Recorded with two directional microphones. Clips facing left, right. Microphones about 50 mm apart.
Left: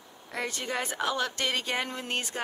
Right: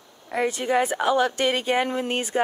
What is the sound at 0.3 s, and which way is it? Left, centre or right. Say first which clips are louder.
Speech: right 10 dB; centre.